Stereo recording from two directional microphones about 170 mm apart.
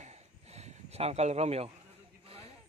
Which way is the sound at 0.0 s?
40° right (ahead or behind).